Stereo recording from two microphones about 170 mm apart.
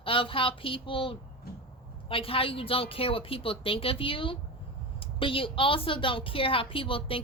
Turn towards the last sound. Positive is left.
turn(degrees=30)  # may be behind; listen again after turning